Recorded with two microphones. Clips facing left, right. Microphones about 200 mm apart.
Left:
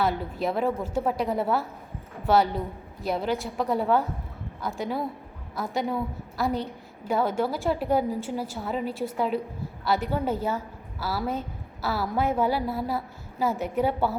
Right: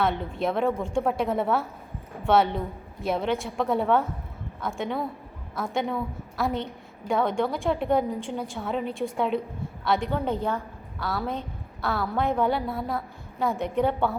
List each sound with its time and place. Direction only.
0.0 s a woman's voice: centre (ahead or behind)